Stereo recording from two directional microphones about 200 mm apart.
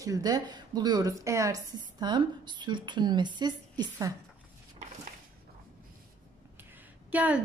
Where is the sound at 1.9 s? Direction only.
20° right (ahead or behind).